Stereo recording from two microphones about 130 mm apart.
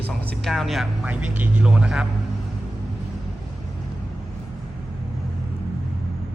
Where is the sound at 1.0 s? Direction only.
10° right (ahead or behind).